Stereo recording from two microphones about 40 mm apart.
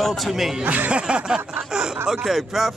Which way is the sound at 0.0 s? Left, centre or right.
Centre.